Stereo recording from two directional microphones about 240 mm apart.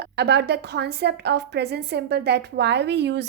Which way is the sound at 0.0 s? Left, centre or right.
Right.